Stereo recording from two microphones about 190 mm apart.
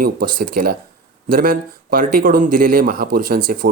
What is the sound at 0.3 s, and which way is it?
Speech, 50° right (ahead or behind).